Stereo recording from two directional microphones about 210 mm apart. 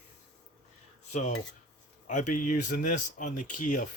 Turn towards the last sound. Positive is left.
turn(degrees=40)  # may be behind; listen again after turning